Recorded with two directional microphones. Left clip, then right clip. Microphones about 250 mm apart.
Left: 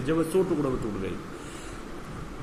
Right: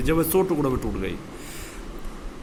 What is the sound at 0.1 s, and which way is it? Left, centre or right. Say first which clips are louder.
A man's voice: right 3 dB; right.